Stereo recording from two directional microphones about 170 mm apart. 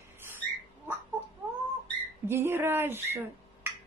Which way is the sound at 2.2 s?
15° right (ahead or behind).